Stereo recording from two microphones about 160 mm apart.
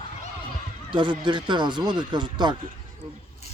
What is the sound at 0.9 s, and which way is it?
Speech, 30° right (ahead or behind).